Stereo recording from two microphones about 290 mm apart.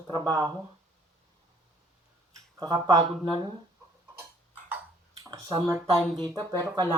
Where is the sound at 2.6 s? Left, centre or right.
Centre.